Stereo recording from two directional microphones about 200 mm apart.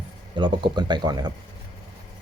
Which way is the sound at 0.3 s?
25° right (ahead or behind).